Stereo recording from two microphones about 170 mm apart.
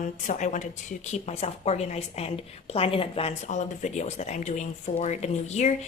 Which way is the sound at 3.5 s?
45° left (ahead or behind).